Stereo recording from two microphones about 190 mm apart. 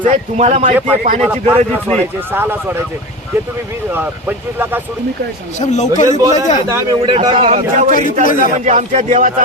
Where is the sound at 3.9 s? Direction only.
10° right (ahead or behind).